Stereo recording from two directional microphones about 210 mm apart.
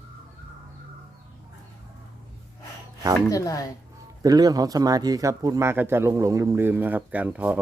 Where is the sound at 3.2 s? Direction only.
15° left (ahead or behind).